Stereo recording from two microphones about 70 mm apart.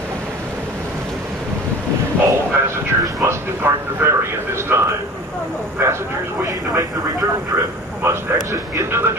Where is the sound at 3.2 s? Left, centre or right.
Right.